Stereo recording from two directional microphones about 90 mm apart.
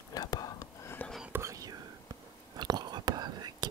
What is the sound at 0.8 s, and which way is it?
Whispering, 25° left (ahead or behind).